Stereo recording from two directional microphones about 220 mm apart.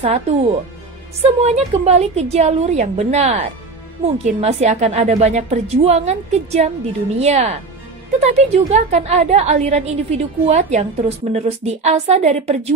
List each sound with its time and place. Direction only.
0.0 s a woman's voice: 25° right (ahead or behind)